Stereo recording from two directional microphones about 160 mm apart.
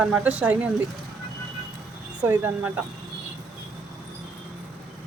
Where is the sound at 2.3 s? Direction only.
15° right (ahead or behind).